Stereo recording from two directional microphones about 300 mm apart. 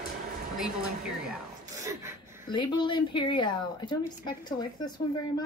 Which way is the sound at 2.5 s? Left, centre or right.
Centre.